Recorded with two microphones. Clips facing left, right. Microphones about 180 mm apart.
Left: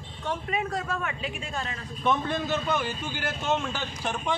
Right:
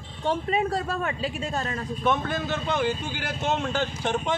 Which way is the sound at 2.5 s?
20° right (ahead or behind).